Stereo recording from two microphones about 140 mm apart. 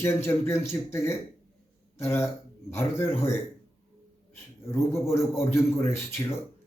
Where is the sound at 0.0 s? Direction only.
20° left (ahead or behind).